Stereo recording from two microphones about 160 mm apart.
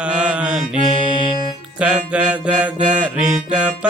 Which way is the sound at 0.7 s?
35° left (ahead or behind).